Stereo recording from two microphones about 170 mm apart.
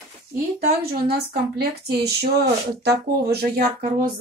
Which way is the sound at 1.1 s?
70° right (ahead or behind).